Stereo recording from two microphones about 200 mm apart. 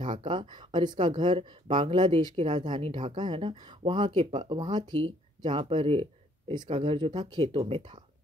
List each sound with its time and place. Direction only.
0.2 s speech: 25° right (ahead or behind)